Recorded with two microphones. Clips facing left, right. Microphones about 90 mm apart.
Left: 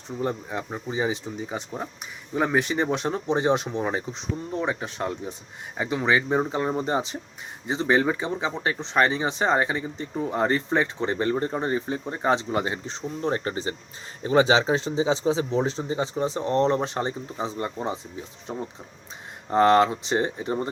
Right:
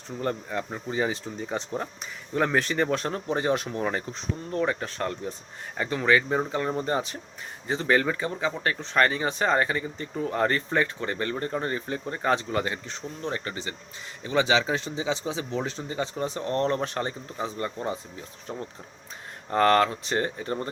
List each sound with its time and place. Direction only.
0.2 s speech: 15° left (ahead or behind)